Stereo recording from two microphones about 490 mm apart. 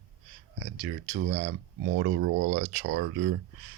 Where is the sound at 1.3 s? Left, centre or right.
Right.